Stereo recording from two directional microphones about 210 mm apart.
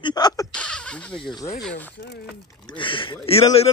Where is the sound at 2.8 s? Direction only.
25° left (ahead or behind).